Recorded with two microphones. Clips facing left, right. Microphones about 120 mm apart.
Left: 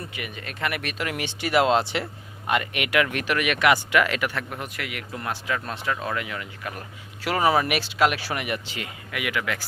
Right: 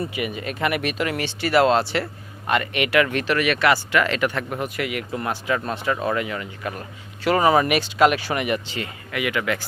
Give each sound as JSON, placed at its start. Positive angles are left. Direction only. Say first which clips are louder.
{"t": 0.0, "sound": "speech", "louder": "right 9 dB", "side_deg": -5}
{"t": 1.1, "sound": "speech", "louder": "right 2 dB", "side_deg": 15}